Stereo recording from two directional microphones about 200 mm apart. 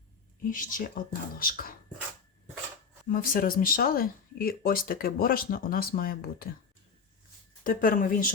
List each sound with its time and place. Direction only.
0.5 s speech: 45° left (ahead or behind)
3.1 s speech: 45° left (ahead or behind)
7.6 s speech: 45° left (ahead or behind)